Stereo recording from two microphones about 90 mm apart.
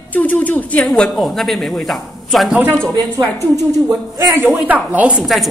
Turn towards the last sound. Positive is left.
turn(degrees=-10)  # may be behind; listen again after turning